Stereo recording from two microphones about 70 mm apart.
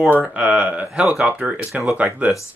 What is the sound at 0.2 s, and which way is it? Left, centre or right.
Speech, centre.